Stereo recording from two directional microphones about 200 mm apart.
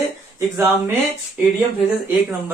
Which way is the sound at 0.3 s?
10° right (ahead or behind).